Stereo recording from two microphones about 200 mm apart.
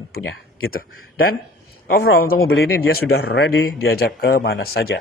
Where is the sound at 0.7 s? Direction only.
50° left (ahead or behind).